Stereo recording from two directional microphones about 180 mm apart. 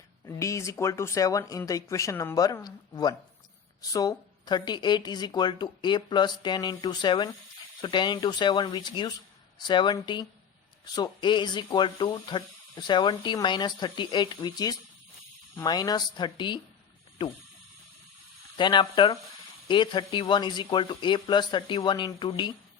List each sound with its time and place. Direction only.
0.3 s speech: 15° left (ahead or behind)
18.5 s speech: 25° left (ahead or behind)